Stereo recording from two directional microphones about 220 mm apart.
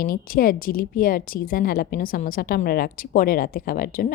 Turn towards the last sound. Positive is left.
turn(degrees=40)  # may be behind; listen again after turning